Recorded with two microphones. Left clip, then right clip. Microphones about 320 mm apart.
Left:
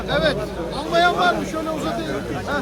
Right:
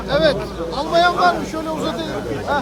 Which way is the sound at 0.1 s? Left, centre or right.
Right.